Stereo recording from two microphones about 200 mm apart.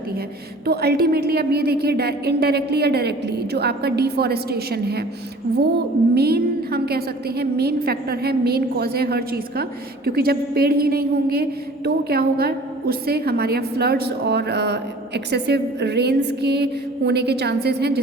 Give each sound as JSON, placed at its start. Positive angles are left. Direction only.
{"t": 0.6, "sound": "a woman's voice", "side_deg": -50}